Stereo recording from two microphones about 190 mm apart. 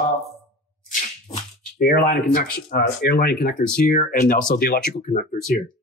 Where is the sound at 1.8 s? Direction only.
50° left (ahead or behind).